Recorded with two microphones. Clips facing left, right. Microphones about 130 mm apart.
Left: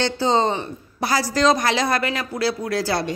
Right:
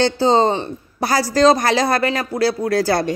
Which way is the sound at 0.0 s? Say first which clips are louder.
Right 5 dB; 35° right (ahead or behind).